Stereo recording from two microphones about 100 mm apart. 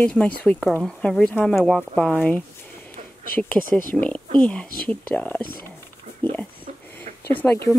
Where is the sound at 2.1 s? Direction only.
15° left (ahead or behind).